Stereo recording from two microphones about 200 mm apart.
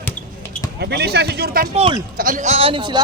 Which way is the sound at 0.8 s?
55° right (ahead or behind).